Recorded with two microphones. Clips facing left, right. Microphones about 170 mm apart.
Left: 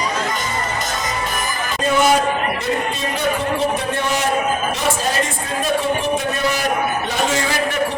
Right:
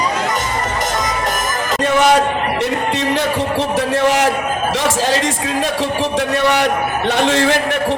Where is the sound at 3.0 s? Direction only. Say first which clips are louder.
Right 4 dB; 90° right; by 7.6 s 65° right (ahead or behind).